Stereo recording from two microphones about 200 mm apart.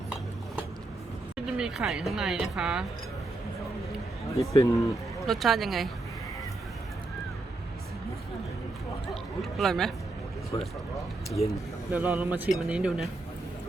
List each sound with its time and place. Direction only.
1.5 s a woman's voice: 5° right (ahead or behind)
4.5 s speech: 15° left (ahead or behind)
5.2 s a woman's voice: centre (ahead or behind)
9.4 s a woman's voice: centre (ahead or behind)
10.5 s speech: 20° left (ahead or behind)
11.9 s a woman's voice: 10° right (ahead or behind)